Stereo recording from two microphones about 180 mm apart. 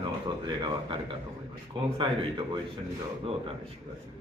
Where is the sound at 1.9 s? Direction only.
30° right (ahead or behind).